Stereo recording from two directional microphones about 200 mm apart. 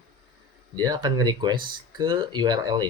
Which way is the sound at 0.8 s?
20° right (ahead or behind).